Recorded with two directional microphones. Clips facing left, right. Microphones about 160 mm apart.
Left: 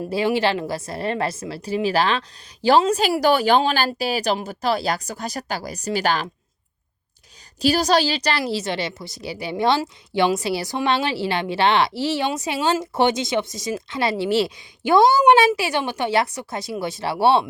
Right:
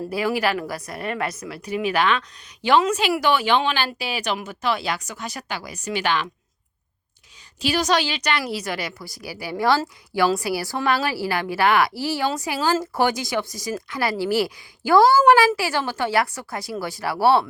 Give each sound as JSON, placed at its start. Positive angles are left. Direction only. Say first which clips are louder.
{"t": 0.1, "sound": "a woman's voice", "louder": "left 3 dB", "side_deg": 25}
{"t": 7.6, "sound": "a woman's voice", "louder": "left 3 dB", "side_deg": 35}